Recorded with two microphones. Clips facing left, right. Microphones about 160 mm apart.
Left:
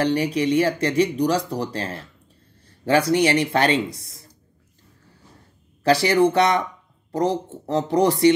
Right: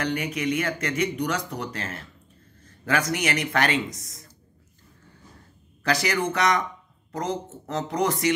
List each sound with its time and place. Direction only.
0.0 s speech: 35° left (ahead or behind)
5.9 s speech: 30° left (ahead or behind)